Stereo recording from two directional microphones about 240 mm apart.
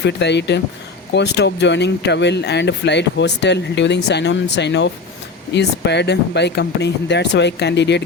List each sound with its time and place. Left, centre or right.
0.0 s speech: left